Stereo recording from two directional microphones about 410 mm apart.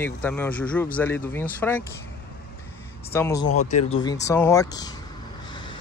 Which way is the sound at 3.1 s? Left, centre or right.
Centre.